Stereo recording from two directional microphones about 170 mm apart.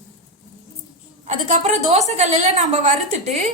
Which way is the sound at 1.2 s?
40° right (ahead or behind).